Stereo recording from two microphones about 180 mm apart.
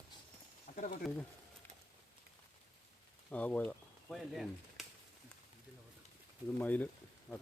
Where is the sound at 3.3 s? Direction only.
10° left (ahead or behind).